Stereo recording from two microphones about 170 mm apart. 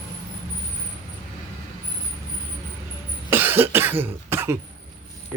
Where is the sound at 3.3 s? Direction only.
10° right (ahead or behind).